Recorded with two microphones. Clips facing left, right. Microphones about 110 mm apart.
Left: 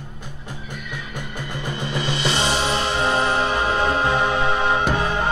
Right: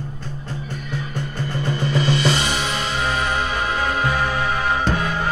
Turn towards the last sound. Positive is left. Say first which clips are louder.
# left 1 dB
turn(degrees=25)  # may be behind; listen again after turning